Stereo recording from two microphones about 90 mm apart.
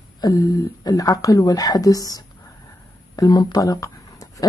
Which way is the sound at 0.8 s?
45° left (ahead or behind).